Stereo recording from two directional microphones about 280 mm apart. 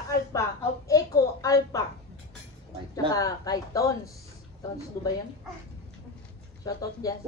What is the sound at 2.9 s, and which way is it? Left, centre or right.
A woman's voice, centre.